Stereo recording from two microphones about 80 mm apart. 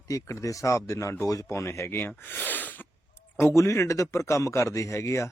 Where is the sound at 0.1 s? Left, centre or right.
Left.